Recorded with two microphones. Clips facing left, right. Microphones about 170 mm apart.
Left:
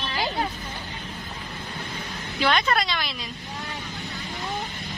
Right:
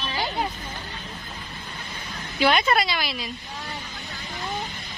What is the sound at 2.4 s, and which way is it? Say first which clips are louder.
Speech: right 2 dB; 10° right (ahead or behind).